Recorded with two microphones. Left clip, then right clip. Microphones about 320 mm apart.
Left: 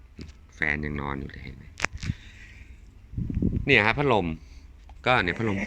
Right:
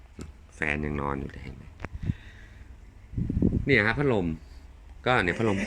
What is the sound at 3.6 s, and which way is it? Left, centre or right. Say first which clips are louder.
Speech: left 3 dB; centre.